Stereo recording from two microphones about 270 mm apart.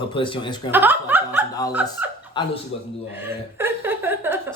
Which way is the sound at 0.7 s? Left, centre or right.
Centre.